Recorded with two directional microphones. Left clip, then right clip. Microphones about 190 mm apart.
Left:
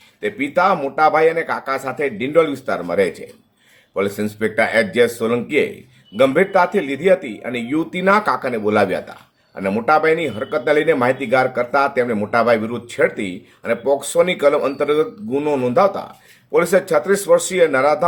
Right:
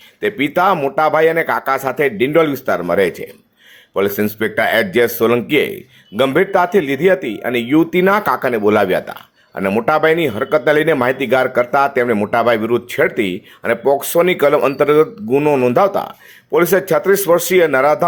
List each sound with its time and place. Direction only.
0.2 s speech: 30° right (ahead or behind)